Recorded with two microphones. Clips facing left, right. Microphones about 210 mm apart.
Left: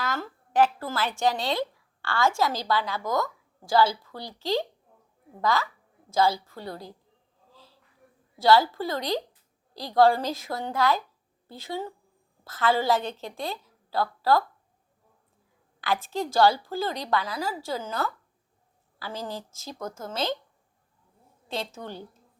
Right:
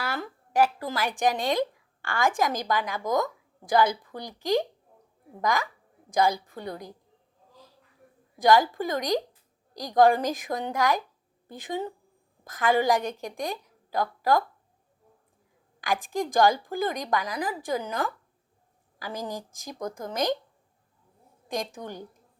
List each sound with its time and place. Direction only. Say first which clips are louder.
0.0 s a woman's voice: left 1 dB; 10° right (ahead or behind)
8.4 s a woman's voice: even; 15° right (ahead or behind)
15.8 s a woman's voice: even; 15° right (ahead or behind)
21.5 s a woman's voice: right 1 dB; 15° right (ahead or behind)